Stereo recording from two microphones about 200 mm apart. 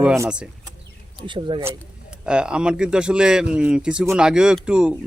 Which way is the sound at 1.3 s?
25° right (ahead or behind).